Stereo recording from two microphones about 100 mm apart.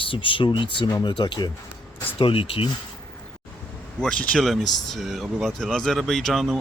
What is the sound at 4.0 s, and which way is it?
Speech, 10° left (ahead or behind).